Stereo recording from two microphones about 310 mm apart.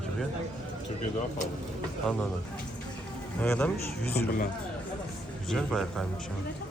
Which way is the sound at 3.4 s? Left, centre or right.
Centre.